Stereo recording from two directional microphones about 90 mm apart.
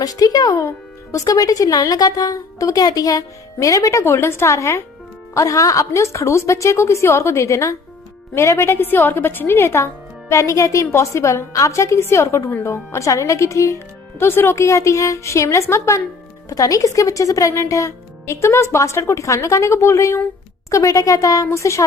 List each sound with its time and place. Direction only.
0.0 s a woman's voice: 45° left (ahead or behind)